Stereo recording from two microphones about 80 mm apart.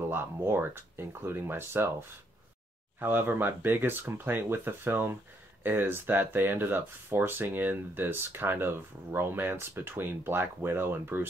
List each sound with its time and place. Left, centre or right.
0.0 s speech: right